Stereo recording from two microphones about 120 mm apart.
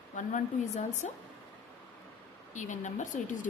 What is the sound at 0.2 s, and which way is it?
Speech, 90° left.